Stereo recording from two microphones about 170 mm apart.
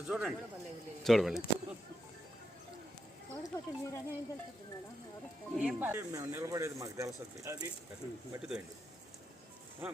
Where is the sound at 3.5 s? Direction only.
20° left (ahead or behind).